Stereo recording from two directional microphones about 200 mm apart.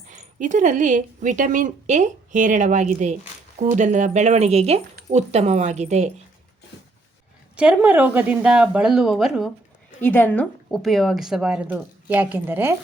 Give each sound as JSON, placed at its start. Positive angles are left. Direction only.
{"t": 0.1, "sound": "speech", "side_deg": -40}
{"t": 7.5, "sound": "a woman's voice", "side_deg": -5}
{"t": 10.0, "sound": "a woman's voice", "side_deg": 10}